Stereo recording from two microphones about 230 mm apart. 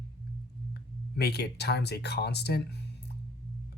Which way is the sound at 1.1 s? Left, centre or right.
Left.